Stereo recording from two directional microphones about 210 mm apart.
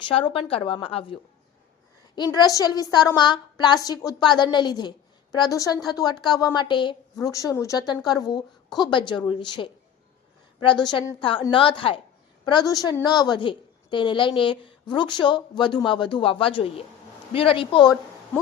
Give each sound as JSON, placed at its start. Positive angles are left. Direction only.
{"t": 0.0, "sound": "a woman's voice", "side_deg": 25}